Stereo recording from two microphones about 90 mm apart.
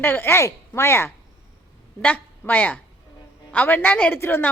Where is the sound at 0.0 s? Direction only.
25° left (ahead or behind).